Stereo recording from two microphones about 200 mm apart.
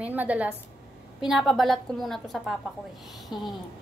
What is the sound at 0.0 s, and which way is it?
A woman's voice, 10° right (ahead or behind).